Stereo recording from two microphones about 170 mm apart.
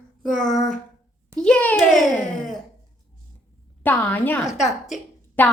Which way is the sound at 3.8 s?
10° left (ahead or behind).